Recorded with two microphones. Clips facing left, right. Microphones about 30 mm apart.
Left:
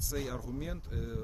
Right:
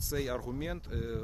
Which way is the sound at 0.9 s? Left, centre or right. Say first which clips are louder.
Right 3 dB; right.